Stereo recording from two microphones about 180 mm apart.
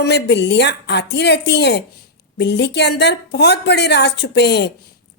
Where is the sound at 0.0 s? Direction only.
70° left (ahead or behind).